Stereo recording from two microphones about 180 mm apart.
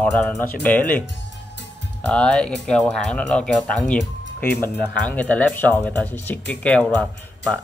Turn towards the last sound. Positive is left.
turn(degrees=5)  # may be behind; listen again after turning